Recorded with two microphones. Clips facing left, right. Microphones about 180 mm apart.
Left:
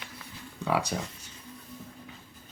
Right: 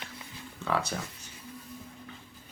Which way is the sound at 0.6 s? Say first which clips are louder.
Left 2 dB; 15° left (ahead or behind).